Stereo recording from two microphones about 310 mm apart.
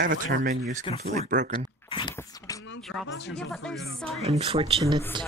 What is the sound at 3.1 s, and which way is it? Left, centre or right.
Speech, left.